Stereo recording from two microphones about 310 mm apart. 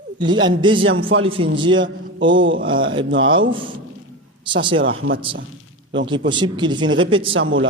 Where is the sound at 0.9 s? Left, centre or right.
Right.